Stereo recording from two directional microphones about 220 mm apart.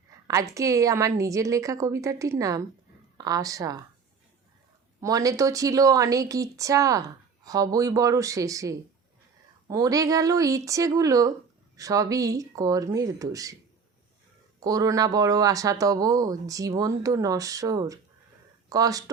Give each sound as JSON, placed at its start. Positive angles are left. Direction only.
{"t": 0.3, "sound": "a man's voice", "side_deg": -15}
{"t": 4.9, "sound": "a man's voice", "side_deg": -15}
{"t": 14.6, "sound": "a man's voice", "side_deg": -15}